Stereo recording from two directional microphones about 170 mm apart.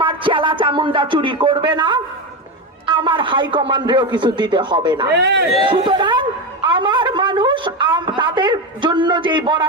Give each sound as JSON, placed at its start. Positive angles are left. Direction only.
{"t": 0.0, "sound": "a man's voice", "side_deg": -30}
{"t": 5.1, "sound": "a man's voice", "side_deg": -85}
{"t": 5.6, "sound": "a woman's voice", "side_deg": -25}